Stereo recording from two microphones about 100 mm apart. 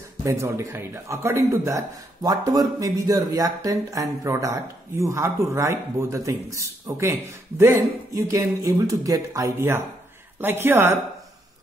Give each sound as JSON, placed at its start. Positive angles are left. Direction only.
{"t": 0.2, "sound": "a man's voice", "side_deg": -30}